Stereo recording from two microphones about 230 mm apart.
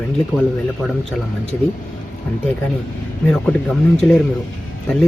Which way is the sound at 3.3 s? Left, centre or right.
Centre.